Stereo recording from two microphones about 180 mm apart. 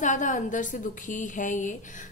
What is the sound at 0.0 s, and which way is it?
A woman's voice, 45° left (ahead or behind).